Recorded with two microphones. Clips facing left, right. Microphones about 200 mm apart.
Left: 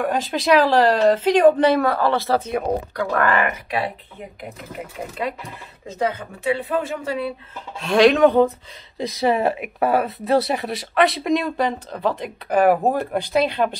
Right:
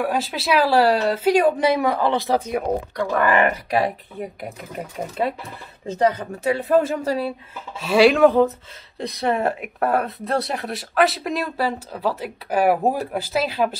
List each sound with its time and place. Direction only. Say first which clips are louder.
0.0 s a woman's voice: left 1 dB; 5° right (ahead or behind)
2.6 s speech: even; centre (ahead or behind)
3.4 s speech: right 4 dB; 40° right (ahead or behind)
5.9 s speech: right 4 dB; 40° right (ahead or behind)
7.8 s speech: even; 5° right (ahead or behind)